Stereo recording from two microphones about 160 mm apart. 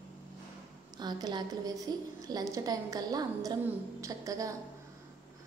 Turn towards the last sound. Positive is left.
turn(degrees=-20)  # may be behind; listen again after turning